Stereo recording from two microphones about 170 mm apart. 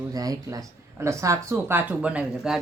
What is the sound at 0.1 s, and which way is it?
Speech, 20° right (ahead or behind).